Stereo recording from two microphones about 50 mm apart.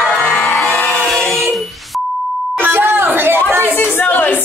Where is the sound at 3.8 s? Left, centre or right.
Left.